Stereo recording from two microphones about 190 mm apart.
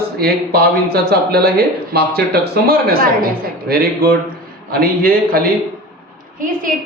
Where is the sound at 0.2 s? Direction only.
55° right (ahead or behind).